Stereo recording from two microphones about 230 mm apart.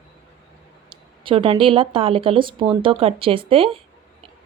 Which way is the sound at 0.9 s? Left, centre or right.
Right.